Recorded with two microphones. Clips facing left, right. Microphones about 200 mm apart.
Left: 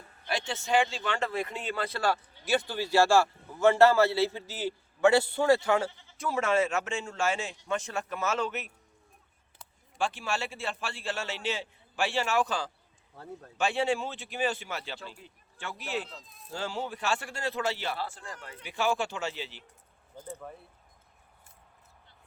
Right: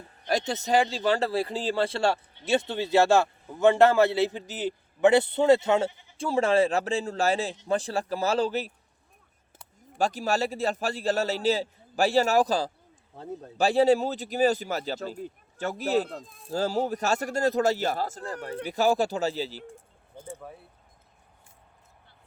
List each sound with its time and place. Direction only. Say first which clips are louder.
0.3 s speech: right 5 dB; 40° right (ahead or behind); by 6.1 s 15° right (ahead or behind)
6.1 s speech: right 5 dB; 30° right (ahead or behind)
10.0 s speech: right 6 dB; 40° right (ahead or behind)
20.2 s speech: right 1 dB; 5° right (ahead or behind)